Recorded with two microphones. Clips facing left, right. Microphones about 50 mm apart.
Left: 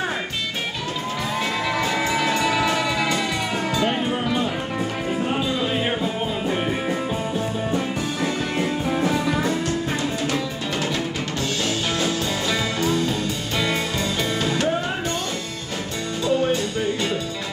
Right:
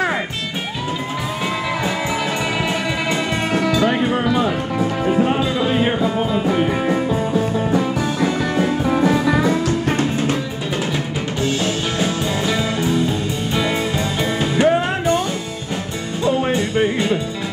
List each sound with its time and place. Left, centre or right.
2.4 s music: centre
11.4 s music: centre